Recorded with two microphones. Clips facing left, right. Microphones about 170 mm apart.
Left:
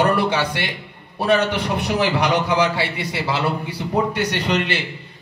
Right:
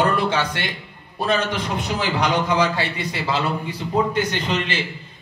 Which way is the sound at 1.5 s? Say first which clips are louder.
Left 4 dB; 65° left (ahead or behind).